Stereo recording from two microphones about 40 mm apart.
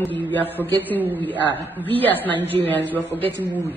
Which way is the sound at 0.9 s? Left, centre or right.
Right.